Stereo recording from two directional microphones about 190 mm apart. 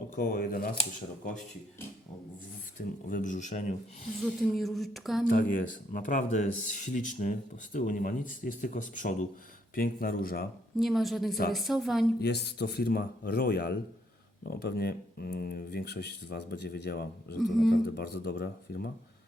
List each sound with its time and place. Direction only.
0.2 s speech: 45° left (ahead or behind)
3.1 s speech: 40° left (ahead or behind)
4.3 s speech: centre (ahead or behind)
5.2 s speech: 45° left (ahead or behind)
10.8 s speech: centre (ahead or behind)
12.2 s speech: 60° left (ahead or behind)
17.4 s speech: centre (ahead or behind)
17.7 s speech: 55° left (ahead or behind)